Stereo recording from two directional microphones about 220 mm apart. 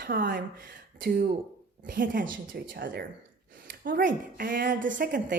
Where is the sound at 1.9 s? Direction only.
40° right (ahead or behind).